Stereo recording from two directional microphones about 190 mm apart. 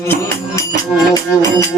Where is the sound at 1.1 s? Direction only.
20° left (ahead or behind).